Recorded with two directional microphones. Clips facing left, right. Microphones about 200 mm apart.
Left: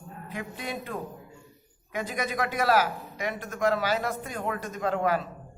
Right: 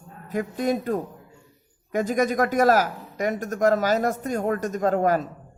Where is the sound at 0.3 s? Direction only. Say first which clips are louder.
Right 11 dB; 45° right (ahead or behind).